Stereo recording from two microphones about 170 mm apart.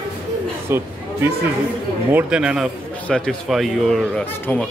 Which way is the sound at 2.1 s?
5° right (ahead or behind).